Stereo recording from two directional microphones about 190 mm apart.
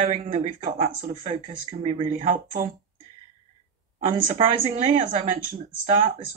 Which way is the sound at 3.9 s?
35° right (ahead or behind).